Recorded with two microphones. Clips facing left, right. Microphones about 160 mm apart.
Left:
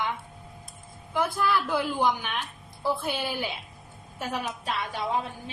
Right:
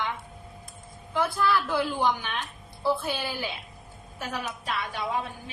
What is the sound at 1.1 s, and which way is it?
A woman's voice, 15° left (ahead or behind).